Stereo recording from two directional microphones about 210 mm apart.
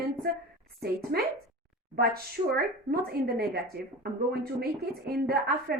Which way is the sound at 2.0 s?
45° right (ahead or behind).